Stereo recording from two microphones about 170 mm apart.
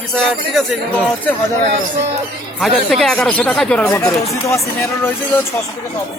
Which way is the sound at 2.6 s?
Centre (ahead or behind).